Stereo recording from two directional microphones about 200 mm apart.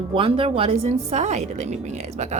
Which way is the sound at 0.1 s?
25° right (ahead or behind).